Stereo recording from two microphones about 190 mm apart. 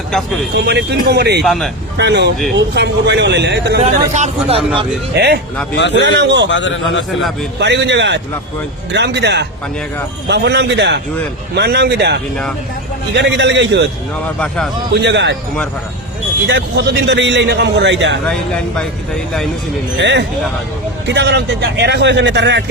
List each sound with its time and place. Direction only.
0.1 s speech: centre (ahead or behind)
0.5 s a man's voice: 60° right (ahead or behind)
1.5 s speech: centre (ahead or behind)
2.0 s speech: 65° right (ahead or behind)
3.8 s speech: 35° right (ahead or behind)
5.1 s a man's voice: 60° right (ahead or behind)
6.5 s speech: 75° left (ahead or behind)
7.6 s a man's voice: 65° right (ahead or behind)
14.3 s speech: 5° left (ahead or behind)
14.9 s speech: 65° right (ahead or behind)
16.5 s a man's voice: 65° right (ahead or behind)
18.8 s speech: 5° left (ahead or behind)
20.0 s a man's voice: 65° right (ahead or behind)